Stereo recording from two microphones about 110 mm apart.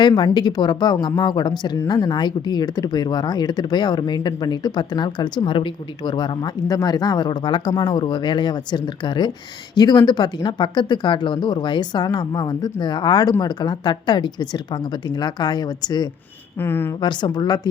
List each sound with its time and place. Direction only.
0.0 s speech: 40° left (ahead or behind)
16.6 s speech: 20° left (ahead or behind)
17.0 s speech: 45° left (ahead or behind)